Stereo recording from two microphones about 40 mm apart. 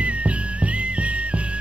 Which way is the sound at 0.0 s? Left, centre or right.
Right.